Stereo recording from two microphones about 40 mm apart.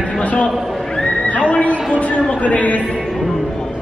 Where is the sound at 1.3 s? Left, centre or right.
Left.